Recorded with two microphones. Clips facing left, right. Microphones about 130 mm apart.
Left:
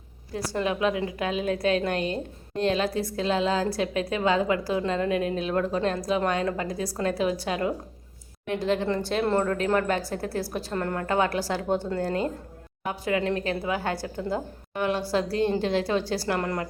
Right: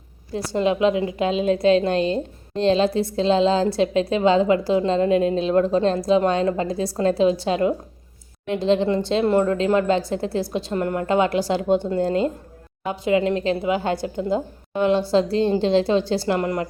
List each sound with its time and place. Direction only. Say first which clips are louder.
0.3 s a woman's voice: right 6 dB; 25° right (ahead or behind)